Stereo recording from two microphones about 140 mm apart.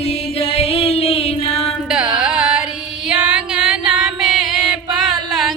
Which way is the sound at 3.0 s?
5° right (ahead or behind).